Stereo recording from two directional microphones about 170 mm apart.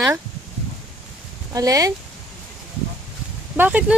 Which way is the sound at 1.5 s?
20° right (ahead or behind).